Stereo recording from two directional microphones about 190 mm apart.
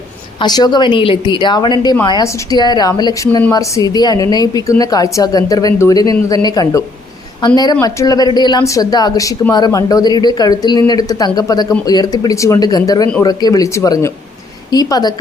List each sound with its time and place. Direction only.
0.3 s speech: 20° left (ahead or behind)